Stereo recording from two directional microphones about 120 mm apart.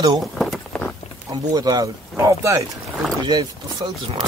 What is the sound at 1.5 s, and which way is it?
Speech, 35° right (ahead or behind).